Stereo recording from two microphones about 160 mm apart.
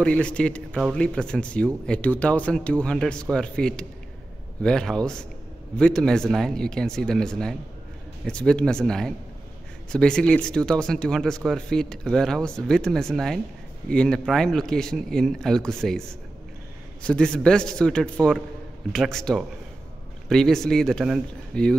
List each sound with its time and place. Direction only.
0.0 s speech: 5° left (ahead or behind)